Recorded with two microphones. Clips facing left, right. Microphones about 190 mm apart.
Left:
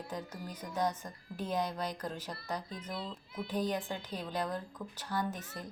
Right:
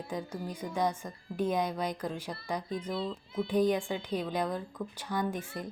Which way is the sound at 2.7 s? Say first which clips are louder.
Right 7 dB; 30° right (ahead or behind).